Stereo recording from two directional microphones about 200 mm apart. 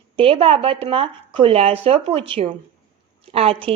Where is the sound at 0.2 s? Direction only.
25° right (ahead or behind).